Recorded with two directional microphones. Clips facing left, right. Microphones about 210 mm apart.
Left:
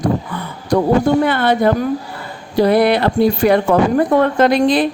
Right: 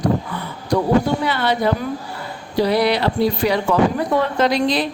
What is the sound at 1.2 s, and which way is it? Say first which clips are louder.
A woman's voice: left 5 dB; 55° left (ahead or behind).